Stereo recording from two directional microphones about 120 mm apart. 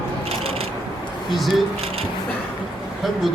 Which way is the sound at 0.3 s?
55° right (ahead or behind).